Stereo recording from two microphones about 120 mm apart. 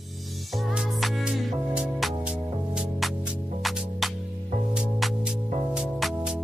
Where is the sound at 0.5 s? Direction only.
5° right (ahead or behind).